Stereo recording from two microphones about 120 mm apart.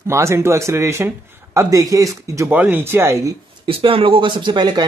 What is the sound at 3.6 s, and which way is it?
Speech, 50° right (ahead or behind).